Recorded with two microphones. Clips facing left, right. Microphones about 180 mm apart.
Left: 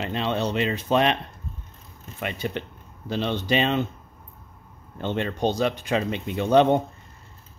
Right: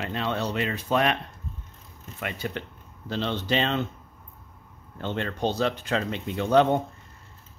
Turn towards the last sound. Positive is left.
turn(degrees=20)  # may be behind; listen again after turning